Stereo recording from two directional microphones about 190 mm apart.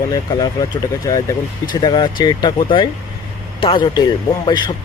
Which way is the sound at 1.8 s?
25° left (ahead or behind).